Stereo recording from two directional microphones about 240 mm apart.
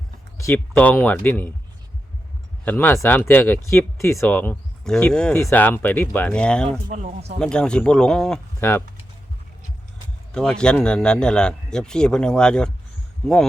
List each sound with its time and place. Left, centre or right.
0.3 s speech: centre
2.6 s speech: centre
6.8 s speech: right
7.3 s speech: centre
10.3 s speech: centre